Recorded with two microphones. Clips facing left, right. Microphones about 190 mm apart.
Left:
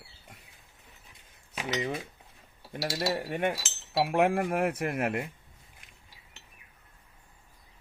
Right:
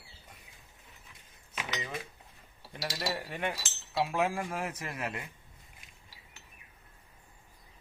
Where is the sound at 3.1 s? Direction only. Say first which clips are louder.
Left 6 dB; 45° left (ahead or behind).